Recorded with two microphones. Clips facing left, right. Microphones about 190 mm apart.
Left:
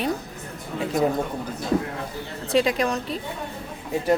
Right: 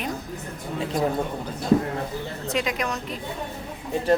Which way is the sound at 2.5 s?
30° left (ahead or behind).